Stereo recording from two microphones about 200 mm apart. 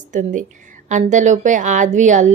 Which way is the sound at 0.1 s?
40° right (ahead or behind).